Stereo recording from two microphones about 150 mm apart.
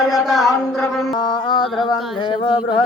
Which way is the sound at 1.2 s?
30° left (ahead or behind).